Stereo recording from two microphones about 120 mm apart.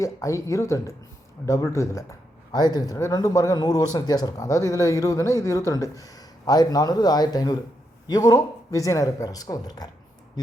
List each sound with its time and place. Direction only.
0.0 s a man's voice: 25° left (ahead or behind)